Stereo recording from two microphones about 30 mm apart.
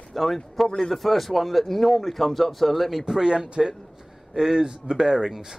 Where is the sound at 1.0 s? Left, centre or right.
Centre.